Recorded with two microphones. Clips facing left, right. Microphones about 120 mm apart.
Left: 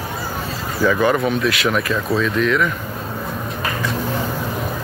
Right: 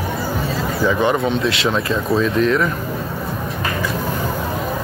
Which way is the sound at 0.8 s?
20° right (ahead or behind).